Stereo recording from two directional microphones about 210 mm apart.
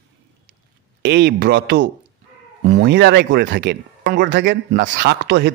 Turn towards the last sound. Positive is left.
turn(degrees=-55)  # may be behind; listen again after turning